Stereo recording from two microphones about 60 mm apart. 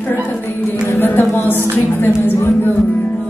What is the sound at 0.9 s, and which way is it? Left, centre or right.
Music, left.